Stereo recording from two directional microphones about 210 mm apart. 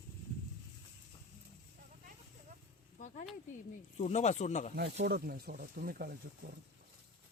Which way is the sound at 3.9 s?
30° left (ahead or behind).